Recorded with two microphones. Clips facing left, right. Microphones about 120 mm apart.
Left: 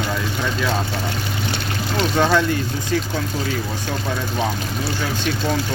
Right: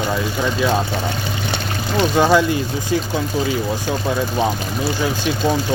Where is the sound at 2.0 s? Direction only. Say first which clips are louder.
Right 3 dB; 10° right (ahead or behind).